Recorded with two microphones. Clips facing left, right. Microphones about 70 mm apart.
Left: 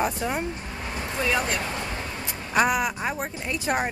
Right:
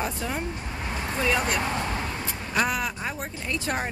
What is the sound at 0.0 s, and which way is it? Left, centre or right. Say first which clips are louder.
Speech: left 4 dB; centre.